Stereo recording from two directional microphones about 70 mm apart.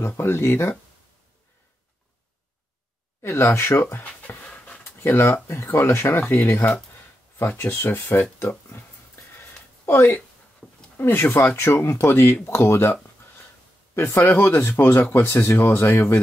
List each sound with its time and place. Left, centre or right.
0.2 s speech: left
3.2 s speech: left
5.0 s speech: left
9.4 s a sound: left
11.0 s speech: left
13.9 s speech: left